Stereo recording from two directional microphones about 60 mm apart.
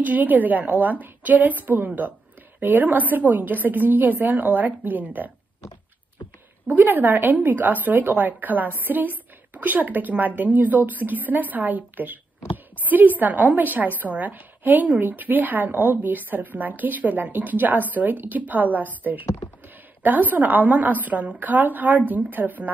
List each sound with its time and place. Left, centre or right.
0.0 s a woman's voice: right
6.7 s a woman's voice: right
20.0 s a woman's voice: right